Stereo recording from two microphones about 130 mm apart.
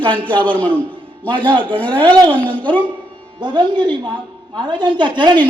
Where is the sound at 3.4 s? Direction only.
35° right (ahead or behind).